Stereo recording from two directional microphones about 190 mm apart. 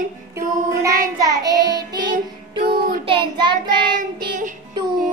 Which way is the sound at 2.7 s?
50° right (ahead or behind).